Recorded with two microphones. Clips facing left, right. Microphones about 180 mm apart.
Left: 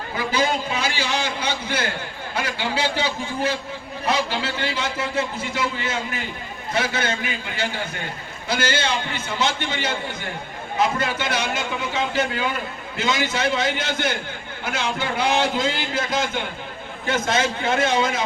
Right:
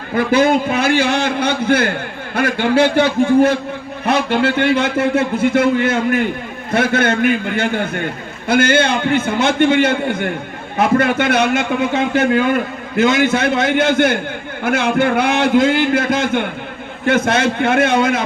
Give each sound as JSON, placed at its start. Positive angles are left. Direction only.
{"t": 0.2, "sound": "a man's voice", "side_deg": -55}